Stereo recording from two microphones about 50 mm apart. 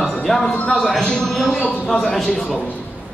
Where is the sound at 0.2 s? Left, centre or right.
Centre.